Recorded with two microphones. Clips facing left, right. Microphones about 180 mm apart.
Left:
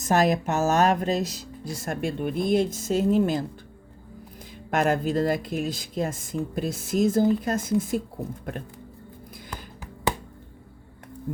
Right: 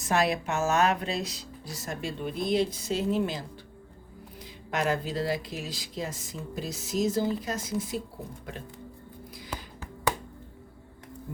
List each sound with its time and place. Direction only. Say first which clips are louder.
0.0 s speech: left 5 dB; 40° left (ahead or behind)
4.7 s speech: left 6 dB; 50° left (ahead or behind)